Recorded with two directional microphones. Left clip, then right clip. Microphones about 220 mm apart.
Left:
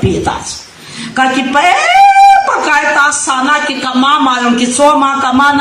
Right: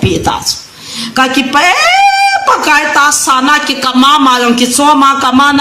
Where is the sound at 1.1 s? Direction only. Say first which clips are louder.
Right 1 dB; 55° right (ahead or behind).